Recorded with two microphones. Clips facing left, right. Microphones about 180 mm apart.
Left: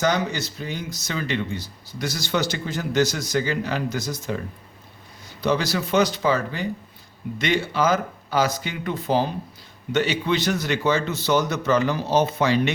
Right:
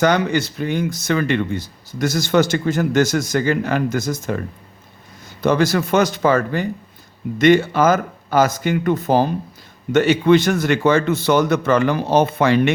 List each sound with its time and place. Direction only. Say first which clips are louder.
0.0 s speech: right 6 dB; 60° right (ahead or behind)
5.4 s a man's voice: right 6 dB; 50° right (ahead or behind)